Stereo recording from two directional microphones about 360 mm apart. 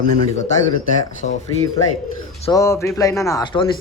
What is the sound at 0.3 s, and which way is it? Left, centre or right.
Speech, centre.